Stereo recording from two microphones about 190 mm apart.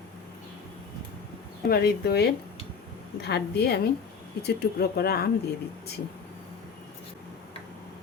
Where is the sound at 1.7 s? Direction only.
55° left (ahead or behind).